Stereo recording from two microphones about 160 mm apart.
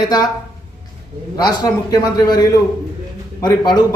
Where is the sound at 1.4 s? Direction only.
25° left (ahead or behind).